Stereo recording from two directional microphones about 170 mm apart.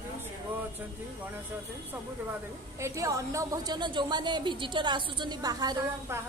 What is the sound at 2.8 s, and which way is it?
A woman's voice, 20° right (ahead or behind).